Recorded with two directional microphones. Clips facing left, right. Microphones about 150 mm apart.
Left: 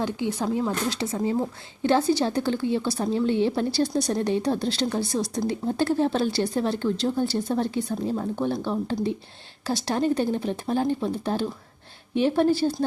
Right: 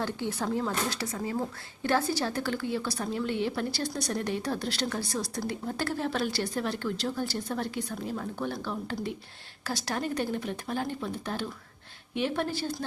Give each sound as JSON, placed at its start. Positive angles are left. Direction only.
{"t": 0.0, "sound": "a woman's voice", "side_deg": 15}